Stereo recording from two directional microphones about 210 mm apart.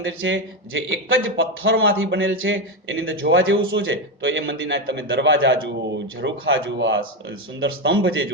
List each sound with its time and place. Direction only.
0.0 s a man's voice: 60° right (ahead or behind)